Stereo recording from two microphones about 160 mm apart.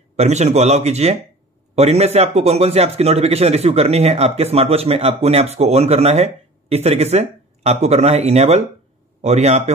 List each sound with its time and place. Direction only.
0.1 s speech: 45° right (ahead or behind)